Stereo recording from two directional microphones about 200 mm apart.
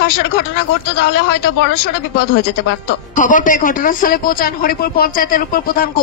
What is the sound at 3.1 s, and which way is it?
A man's voice, 40° left (ahead or behind).